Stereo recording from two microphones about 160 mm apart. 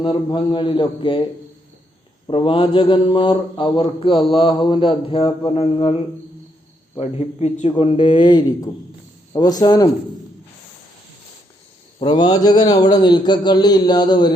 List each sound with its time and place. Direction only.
0.0 s speech: 30° left (ahead or behind)
2.2 s speech: 30° left (ahead or behind)
7.0 s a man's voice: 40° left (ahead or behind); by 9.9 s 25° left (ahead or behind)
11.9 s a man's voice: 25° left (ahead or behind)